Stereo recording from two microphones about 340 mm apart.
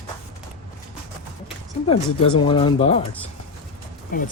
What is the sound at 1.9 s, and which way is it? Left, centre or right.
Speech, centre.